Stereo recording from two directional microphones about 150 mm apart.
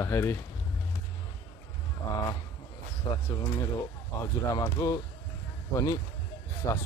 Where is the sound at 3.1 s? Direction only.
30° left (ahead or behind).